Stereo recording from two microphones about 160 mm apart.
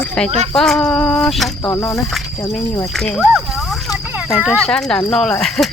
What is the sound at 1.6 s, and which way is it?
Speech, 15° left (ahead or behind).